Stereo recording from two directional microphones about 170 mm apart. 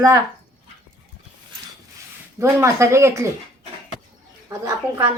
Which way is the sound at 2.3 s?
15° right (ahead or behind).